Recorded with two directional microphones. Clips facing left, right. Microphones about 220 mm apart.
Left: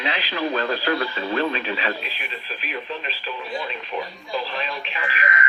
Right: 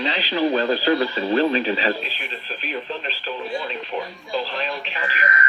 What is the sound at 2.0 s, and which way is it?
Speech, 10° left (ahead or behind).